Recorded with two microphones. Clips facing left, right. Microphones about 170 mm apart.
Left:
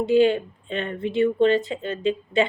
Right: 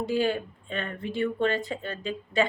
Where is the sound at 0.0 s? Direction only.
20° left (ahead or behind).